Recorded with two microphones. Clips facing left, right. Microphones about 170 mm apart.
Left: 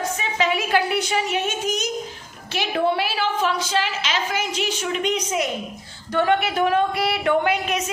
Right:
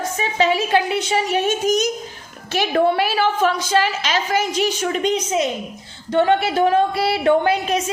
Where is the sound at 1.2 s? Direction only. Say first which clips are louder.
Right 6 dB; 40° right (ahead or behind).